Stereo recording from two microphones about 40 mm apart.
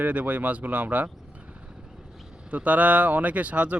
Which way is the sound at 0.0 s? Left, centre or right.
Right.